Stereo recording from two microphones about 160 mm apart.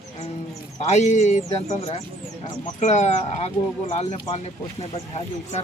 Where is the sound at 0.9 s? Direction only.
45° left (ahead or behind).